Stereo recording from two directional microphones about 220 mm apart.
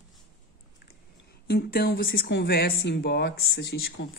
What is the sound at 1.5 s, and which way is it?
Speech, 45° left (ahead or behind).